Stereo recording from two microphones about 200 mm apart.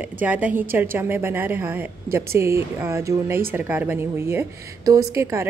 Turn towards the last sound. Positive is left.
turn(degrees=-15)  # may be behind; listen again after turning